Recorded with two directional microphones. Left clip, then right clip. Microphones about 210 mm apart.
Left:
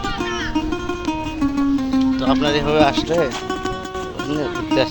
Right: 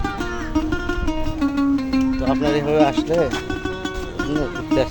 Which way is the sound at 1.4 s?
Centre (ahead or behind).